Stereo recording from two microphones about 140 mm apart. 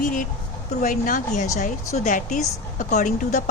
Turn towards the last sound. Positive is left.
turn(degrees=65)  # may be behind; listen again after turning